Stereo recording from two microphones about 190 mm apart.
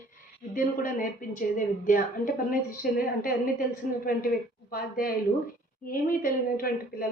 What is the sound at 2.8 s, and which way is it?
Speech, 50° left (ahead or behind).